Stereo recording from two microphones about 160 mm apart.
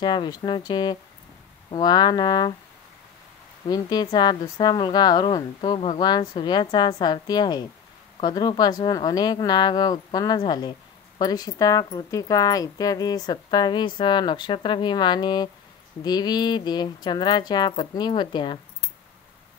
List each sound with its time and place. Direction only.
0.0 s speech: 30° left (ahead or behind)
3.6 s speech: 25° left (ahead or behind)